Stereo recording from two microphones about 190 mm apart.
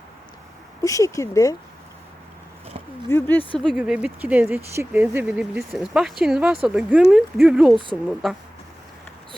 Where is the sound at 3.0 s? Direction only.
10° left (ahead or behind).